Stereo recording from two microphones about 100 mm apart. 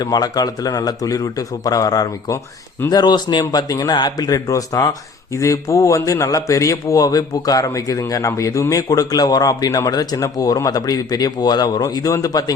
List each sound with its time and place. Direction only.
0.0 s speech: 40° left (ahead or behind)